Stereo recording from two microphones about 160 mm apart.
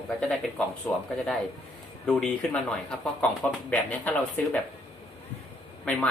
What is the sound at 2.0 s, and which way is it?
A woman's voice, 5° left (ahead or behind).